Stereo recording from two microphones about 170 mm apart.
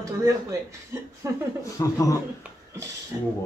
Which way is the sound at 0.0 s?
20° right (ahead or behind).